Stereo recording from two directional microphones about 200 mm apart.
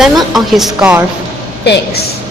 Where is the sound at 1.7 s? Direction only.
55° left (ahead or behind).